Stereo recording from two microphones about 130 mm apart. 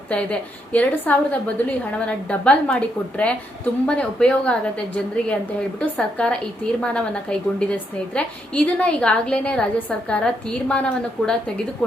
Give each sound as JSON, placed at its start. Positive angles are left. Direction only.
{"t": 0.1, "sound": "a woman's voice", "side_deg": 10}
{"t": 5.8, "sound": "a woman's voice", "side_deg": 10}